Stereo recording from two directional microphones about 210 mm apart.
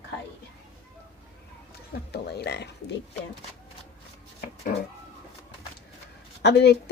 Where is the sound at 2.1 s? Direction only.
50° left (ahead or behind).